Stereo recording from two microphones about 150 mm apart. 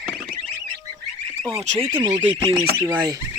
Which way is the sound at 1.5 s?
45° right (ahead or behind).